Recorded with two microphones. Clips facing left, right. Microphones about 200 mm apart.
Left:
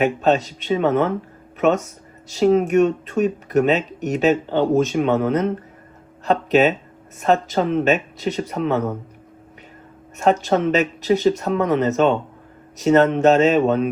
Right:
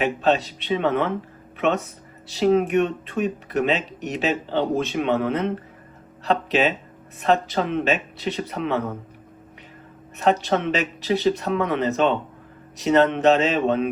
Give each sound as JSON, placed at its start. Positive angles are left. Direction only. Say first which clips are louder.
{"t": 0.0, "sound": "speech", "louder": "left 3 dB", "side_deg": 45}
{"t": 10.2, "sound": "speech", "louder": "left 3 dB", "side_deg": 45}